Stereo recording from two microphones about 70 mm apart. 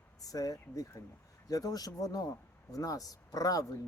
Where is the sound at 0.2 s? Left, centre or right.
Left.